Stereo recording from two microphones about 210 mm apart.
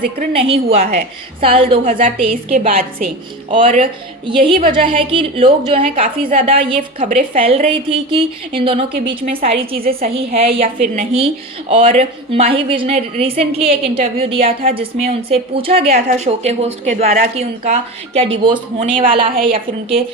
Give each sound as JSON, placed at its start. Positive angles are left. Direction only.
{"t": 0.2, "sound": "a woman's voice", "side_deg": -30}
{"t": 2.3, "sound": "a woman's voice", "side_deg": -40}
{"t": 4.3, "sound": "a woman's voice", "side_deg": -25}
{"t": 7.0, "sound": "a woman's voice", "side_deg": -40}
{"t": 7.3, "sound": "a woman's voice", "side_deg": -25}
{"t": 17.3, "sound": "a woman's voice", "side_deg": -30}